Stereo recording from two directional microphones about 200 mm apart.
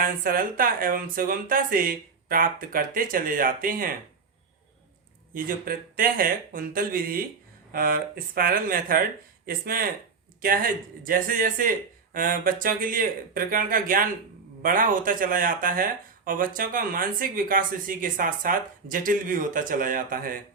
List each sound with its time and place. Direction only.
0.0 s speech: 45° right (ahead or behind)
5.3 s speech: 45° right (ahead or behind)